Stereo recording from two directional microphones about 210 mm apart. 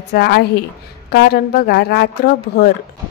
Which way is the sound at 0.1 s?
50° left (ahead or behind).